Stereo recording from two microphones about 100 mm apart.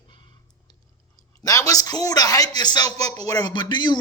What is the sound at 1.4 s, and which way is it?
Speech, 35° left (ahead or behind).